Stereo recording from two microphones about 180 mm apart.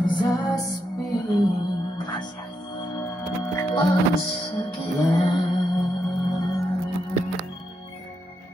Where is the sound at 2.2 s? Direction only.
25° left (ahead or behind).